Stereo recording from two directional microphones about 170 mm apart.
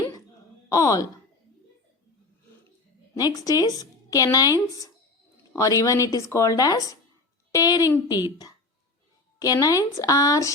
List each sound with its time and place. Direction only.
0.7 s a woman's voice: 20° left (ahead or behind)
3.2 s a woman's voice: 20° left (ahead or behind)
5.5 s a woman's voice: 20° left (ahead or behind)
9.4 s a woman's voice: 20° left (ahead or behind)